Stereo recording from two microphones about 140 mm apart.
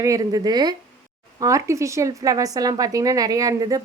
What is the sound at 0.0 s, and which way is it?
Speech, 25° right (ahead or behind).